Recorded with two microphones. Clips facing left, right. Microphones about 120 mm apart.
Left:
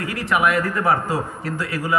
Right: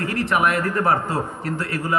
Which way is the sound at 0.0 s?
60° right (ahead or behind).